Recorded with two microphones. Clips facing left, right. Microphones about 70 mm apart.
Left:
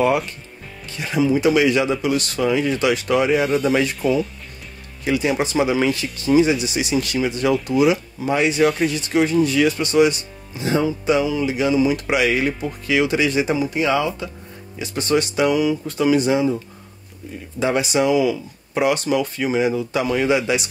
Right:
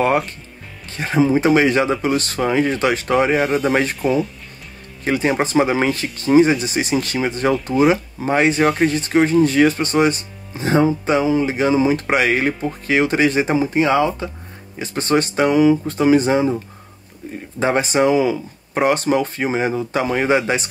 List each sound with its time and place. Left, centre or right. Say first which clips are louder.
0.9 s speech: right 3 dB; right
4.0 s speech: right 1 dB; centre
5.0 s speech: right 2 dB; right
17.6 s speech: right 2 dB; right